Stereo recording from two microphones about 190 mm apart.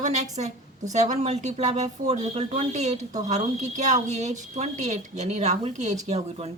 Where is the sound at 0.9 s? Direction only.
35° right (ahead or behind).